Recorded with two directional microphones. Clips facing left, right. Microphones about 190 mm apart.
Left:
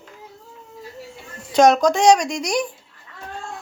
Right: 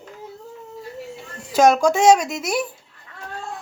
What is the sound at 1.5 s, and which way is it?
A woman's voice, 5° right (ahead or behind).